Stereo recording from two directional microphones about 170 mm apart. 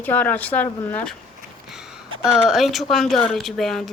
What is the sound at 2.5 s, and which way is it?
Speech, centre (ahead or behind).